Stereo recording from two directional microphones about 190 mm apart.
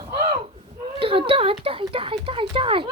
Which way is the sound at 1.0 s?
30° right (ahead or behind).